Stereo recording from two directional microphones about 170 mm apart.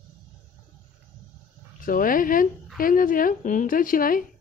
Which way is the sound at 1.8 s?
55° left (ahead or behind).